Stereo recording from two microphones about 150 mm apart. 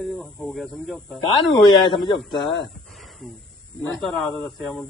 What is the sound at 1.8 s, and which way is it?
Speech, 30° left (ahead or behind).